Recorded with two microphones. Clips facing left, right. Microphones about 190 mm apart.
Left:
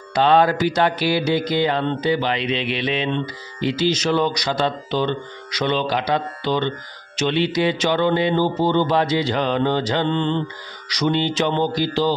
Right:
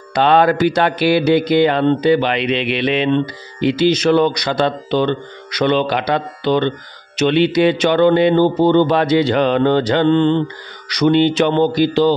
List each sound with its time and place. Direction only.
0.1 s speech: 65° right (ahead or behind)